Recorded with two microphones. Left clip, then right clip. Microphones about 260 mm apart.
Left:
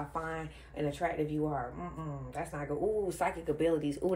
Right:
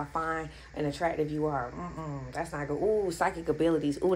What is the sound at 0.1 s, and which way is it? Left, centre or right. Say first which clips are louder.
Speech: right 6 dB; right.